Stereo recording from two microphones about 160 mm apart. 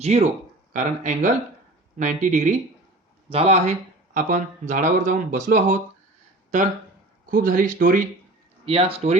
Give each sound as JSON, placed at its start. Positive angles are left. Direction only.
{"t": 0.0, "sound": "speech", "side_deg": -45}
{"t": 7.3, "sound": "speech", "side_deg": -60}
{"t": 8.6, "sound": "speech", "side_deg": -35}